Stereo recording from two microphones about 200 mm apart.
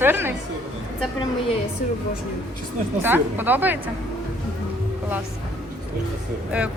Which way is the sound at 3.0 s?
10° right (ahead or behind).